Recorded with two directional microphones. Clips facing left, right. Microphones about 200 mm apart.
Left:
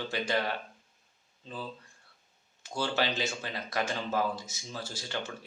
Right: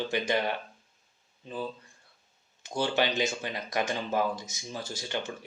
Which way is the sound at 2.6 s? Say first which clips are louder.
Right 3 dB; 20° right (ahead or behind).